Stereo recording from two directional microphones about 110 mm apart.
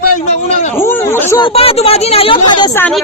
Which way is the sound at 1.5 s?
65° left (ahead or behind).